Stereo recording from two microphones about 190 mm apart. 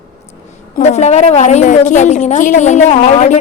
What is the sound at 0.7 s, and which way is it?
A woman's voice, 35° left (ahead or behind).